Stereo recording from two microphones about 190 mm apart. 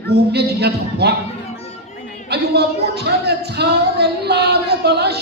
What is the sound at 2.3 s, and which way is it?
Speech, 60° right (ahead or behind).